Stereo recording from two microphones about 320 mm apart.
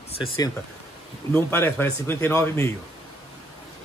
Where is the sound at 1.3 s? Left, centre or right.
Centre.